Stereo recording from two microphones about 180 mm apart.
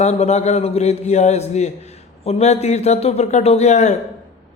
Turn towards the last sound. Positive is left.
turn(degrees=40)  # may be behind; listen again after turning